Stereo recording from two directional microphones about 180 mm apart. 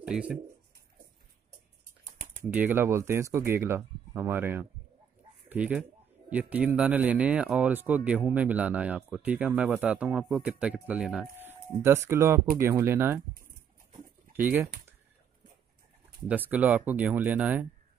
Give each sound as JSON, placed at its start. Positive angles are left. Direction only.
{"t": 0.0, "sound": "speech", "side_deg": -5}
{"t": 2.5, "sound": "speech", "side_deg": -10}
{"t": 14.3, "sound": "speech", "side_deg": -10}
{"t": 16.3, "sound": "speech", "side_deg": -10}